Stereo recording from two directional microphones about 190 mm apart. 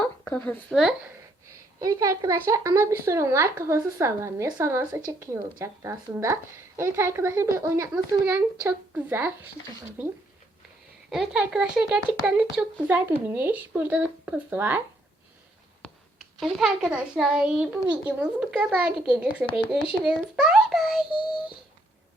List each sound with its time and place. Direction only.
0.0 s speech: 10° left (ahead or behind)
1.8 s speech: 15° right (ahead or behind)
11.1 s speech: centre (ahead or behind)
16.4 s a child's voice: centre (ahead or behind)